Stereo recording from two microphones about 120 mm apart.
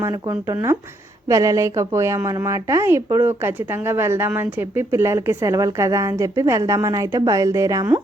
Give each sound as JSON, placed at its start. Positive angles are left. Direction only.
{"t": 0.0, "sound": "speech", "side_deg": -30}